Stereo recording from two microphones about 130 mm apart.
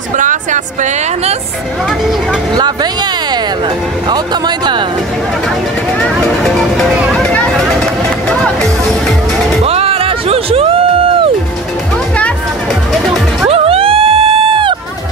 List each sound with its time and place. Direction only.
0.2 s music: 80° right
2.5 s speech: 30° right (ahead or behind)
4.1 s speech: 35° right (ahead or behind)
6.2 s music: centre (ahead or behind)
9.7 s music: 50° right (ahead or behind)
12.9 s music: centre (ahead or behind)
13.5 s dog: 45° right (ahead or behind)